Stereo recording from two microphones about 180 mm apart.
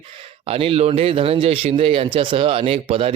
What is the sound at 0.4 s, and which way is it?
A man's voice, 30° right (ahead or behind).